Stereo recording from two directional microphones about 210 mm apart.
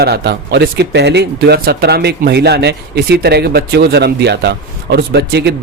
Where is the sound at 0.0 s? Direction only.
50° right (ahead or behind).